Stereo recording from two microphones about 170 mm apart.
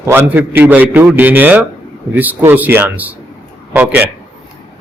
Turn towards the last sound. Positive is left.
turn(degrees=-10)  # may be behind; listen again after turning